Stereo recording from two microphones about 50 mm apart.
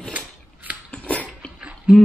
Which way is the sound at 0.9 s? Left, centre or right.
Left.